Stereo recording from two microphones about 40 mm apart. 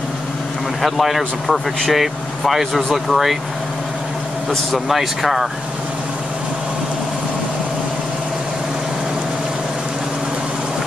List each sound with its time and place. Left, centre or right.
0.8 s speech: centre
4.5 s speech: centre